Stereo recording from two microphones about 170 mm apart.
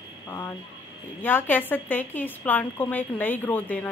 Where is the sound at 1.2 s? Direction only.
10° left (ahead or behind).